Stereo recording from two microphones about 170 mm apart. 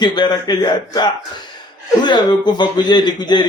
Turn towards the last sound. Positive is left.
turn(degrees=25)  # may be behind; listen again after turning